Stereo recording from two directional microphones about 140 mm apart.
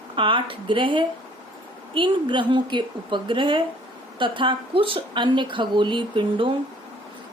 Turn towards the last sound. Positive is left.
turn(degrees=-35)  # may be behind; listen again after turning